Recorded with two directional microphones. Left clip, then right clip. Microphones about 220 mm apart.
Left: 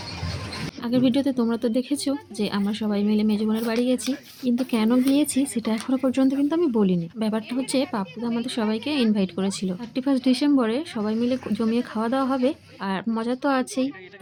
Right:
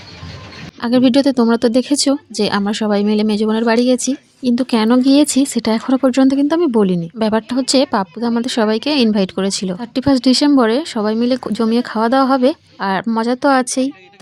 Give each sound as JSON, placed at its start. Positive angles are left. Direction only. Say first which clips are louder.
{"t": 0.8, "sound": "speech", "louder": "right 10 dB", "side_deg": -50}